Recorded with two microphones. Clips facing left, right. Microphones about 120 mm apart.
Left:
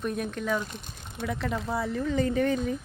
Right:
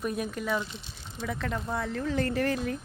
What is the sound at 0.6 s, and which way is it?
Speech, 50° left (ahead or behind).